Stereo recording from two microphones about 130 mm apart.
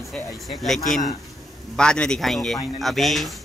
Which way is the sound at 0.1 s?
5° left (ahead or behind).